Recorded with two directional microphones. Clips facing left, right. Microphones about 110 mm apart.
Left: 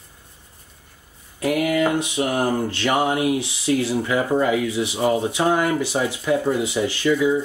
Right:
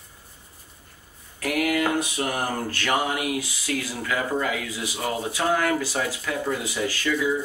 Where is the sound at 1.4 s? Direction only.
20° left (ahead or behind).